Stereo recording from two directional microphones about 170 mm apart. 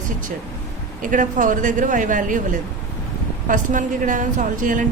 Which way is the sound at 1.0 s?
50° right (ahead or behind).